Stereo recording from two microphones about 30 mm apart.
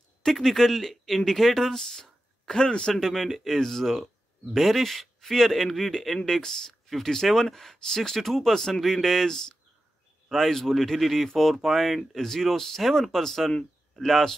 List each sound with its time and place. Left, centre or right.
0.2 s speech: centre
1.6 s speech: centre
2.9 s speech: centre
3.2 s speech: centre